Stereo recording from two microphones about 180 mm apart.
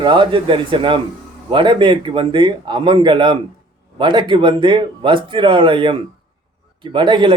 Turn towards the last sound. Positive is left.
turn(degrees=-25)  # may be behind; listen again after turning